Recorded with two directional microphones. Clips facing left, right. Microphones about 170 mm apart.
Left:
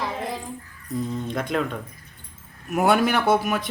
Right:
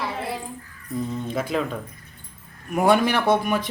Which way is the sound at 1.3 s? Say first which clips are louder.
Right 1 dB; 5° right (ahead or behind).